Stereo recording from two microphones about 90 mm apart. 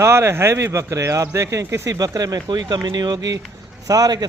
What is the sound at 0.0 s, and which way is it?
Speech, 30° right (ahead or behind).